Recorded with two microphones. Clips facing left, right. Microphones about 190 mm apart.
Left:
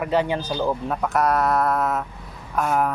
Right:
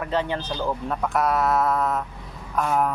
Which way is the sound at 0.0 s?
10° left (ahead or behind).